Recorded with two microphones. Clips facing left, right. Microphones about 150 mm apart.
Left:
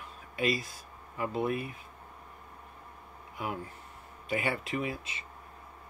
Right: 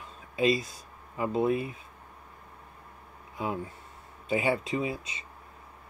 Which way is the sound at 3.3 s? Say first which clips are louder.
Right 4 dB; 25° right (ahead or behind).